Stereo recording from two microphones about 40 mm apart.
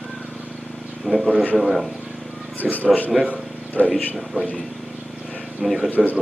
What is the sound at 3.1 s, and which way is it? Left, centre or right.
Speech, right.